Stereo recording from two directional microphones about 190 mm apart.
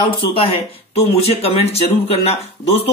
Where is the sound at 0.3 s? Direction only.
30° left (ahead or behind).